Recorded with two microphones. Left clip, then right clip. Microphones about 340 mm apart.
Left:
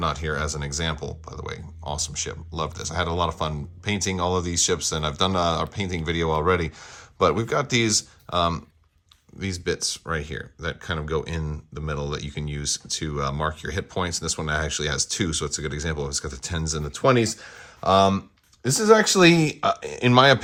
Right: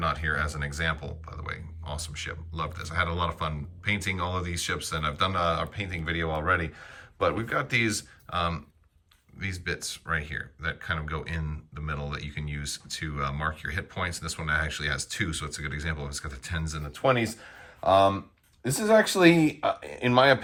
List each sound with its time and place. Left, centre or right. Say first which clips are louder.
0.0 s speech: left 2 dB; centre
18.7 s speech: left 5 dB; left